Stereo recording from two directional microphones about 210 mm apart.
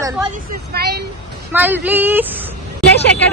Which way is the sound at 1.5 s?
10° right (ahead or behind).